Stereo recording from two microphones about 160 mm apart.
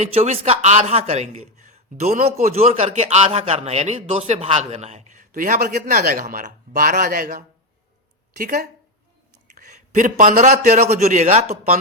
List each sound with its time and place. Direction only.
0.0 s a man's voice: 40° right (ahead or behind)
10.8 s a man's voice: 45° right (ahead or behind)